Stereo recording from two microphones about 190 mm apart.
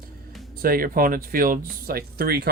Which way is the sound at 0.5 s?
50° right (ahead or behind).